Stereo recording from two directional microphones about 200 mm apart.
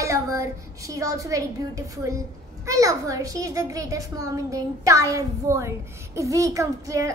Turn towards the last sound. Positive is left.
turn(degrees=-15)  # may be behind; listen again after turning